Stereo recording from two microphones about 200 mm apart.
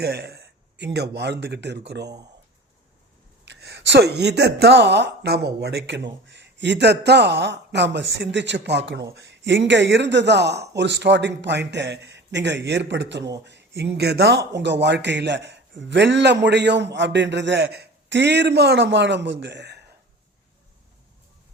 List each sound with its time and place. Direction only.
0.0 s speech: 55° right (ahead or behind)
3.4 s speech: 60° right (ahead or behind)